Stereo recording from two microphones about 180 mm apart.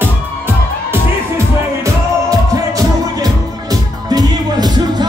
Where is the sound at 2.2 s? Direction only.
20° right (ahead or behind).